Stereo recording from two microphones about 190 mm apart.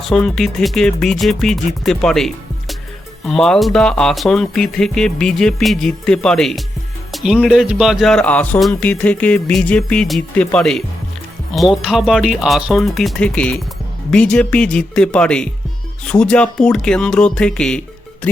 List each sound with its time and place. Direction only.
0.1 s speech: centre (ahead or behind)